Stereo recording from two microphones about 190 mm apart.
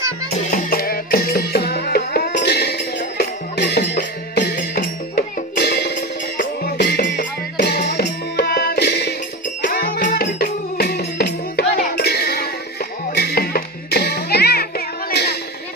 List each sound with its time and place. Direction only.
0.5 s music: 50° left (ahead or behind)